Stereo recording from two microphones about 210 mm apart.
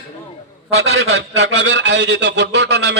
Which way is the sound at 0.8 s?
60° right (ahead or behind).